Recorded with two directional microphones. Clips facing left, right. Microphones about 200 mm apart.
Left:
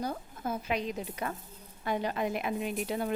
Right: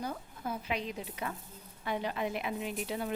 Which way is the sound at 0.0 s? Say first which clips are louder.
Left 3 dB; 40° left (ahead or behind).